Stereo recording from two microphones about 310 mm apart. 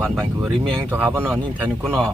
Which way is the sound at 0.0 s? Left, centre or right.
Centre.